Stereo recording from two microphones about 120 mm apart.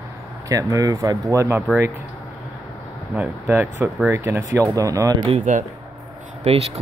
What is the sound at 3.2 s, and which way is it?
Speech, 15° right (ahead or behind).